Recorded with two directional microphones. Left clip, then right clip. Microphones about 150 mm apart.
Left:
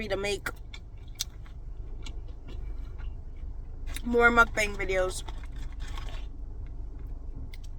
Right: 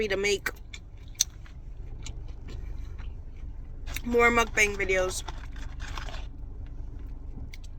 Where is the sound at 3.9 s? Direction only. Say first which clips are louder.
Even; 25° left (ahead or behind).